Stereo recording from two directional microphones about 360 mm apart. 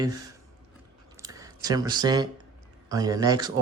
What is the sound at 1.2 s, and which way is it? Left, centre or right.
Speech, centre.